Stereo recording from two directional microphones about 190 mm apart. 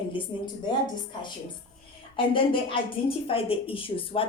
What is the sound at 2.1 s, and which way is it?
A woman's voice, 25° left (ahead or behind).